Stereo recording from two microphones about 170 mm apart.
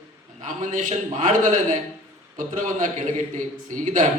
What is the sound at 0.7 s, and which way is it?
A man's voice, 45° right (ahead or behind).